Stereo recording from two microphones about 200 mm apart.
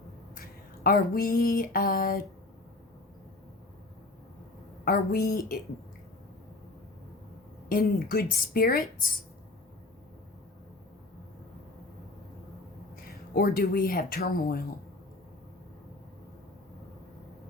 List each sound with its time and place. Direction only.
0.9 s a woman's voice: 45° left (ahead or behind)
4.9 s a woman's voice: 45° left (ahead or behind)
7.7 s a woman's voice: 45° left (ahead or behind)
13.3 s a woman's voice: 45° left (ahead or behind)